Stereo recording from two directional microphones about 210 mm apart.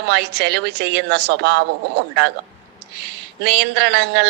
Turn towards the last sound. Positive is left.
turn(degrees=-50)  # may be behind; listen again after turning